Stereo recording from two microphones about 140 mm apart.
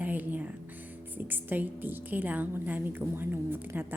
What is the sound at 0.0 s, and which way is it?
A woman's voice, 10° right (ahead or behind).